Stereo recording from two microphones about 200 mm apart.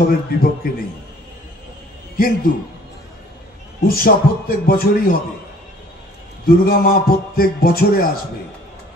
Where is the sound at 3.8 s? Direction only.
50° left (ahead or behind).